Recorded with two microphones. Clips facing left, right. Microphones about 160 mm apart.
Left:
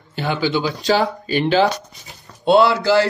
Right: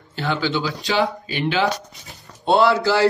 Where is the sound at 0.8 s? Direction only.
40° left (ahead or behind).